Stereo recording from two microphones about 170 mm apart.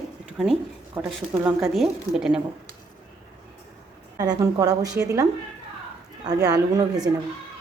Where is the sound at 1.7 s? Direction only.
Centre (ahead or behind).